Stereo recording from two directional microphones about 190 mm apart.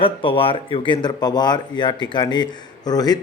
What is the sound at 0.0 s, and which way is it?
Speech, 25° left (ahead or behind).